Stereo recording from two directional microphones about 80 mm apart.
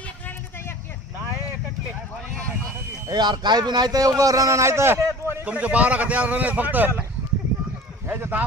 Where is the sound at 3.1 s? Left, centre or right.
Right.